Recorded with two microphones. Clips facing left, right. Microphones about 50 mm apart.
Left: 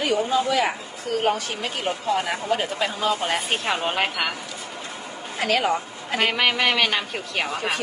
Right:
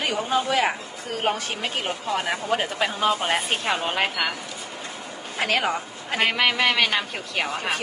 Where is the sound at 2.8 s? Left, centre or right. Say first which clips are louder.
Right 1 dB; right.